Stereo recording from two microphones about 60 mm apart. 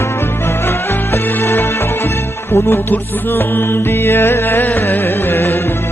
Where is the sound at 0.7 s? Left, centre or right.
Left.